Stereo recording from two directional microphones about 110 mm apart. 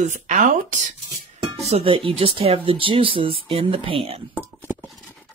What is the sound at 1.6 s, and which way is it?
Speech, 65° right (ahead or behind).